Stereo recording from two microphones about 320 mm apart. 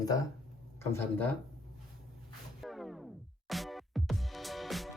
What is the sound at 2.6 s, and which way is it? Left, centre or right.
Music, centre.